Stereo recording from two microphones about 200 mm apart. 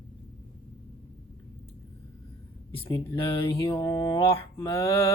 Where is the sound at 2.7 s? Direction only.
25° left (ahead or behind).